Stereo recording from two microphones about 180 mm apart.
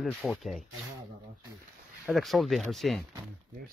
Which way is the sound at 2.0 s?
Centre (ahead or behind).